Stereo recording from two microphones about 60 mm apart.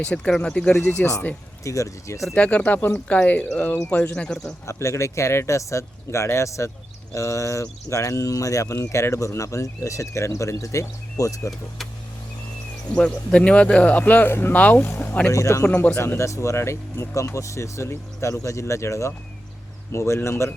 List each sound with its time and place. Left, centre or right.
0.0 s speech: centre
1.0 s speech: left
1.6 s speech: left
2.3 s speech: left
4.6 s speech: left
12.9 s speech: centre
14.8 s speech: left
15.0 s speech: left
15.3 s speech: left
15.6 s speech: left
16.0 s speech: left